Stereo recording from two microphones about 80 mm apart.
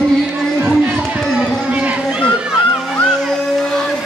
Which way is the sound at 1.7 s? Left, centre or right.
Centre.